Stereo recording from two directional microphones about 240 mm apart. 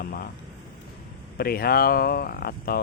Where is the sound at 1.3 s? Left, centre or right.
Left.